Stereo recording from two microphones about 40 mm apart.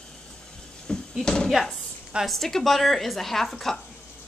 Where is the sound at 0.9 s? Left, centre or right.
Left.